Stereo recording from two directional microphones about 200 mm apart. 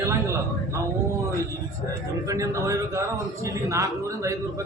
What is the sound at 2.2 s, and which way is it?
A man's voice, 15° right (ahead or behind).